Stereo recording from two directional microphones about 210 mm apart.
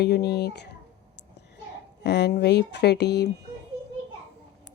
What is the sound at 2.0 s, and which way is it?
Speech, 55° left (ahead or behind).